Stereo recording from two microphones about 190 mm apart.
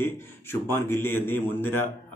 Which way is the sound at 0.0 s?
10° left (ahead or behind).